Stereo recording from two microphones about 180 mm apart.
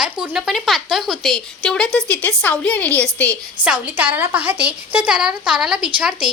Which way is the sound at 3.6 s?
10° right (ahead or behind).